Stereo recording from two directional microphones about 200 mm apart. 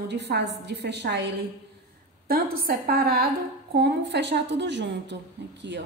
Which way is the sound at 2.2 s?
45° right (ahead or behind).